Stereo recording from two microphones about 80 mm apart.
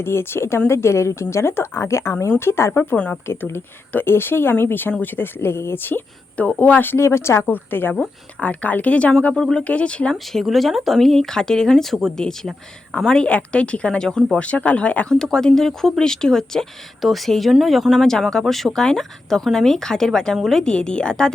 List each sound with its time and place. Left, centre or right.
0.0 s speech: left
7.0 s speech: left; by 9.1 s centre
9.3 s speech: centre
10.4 s speech: centre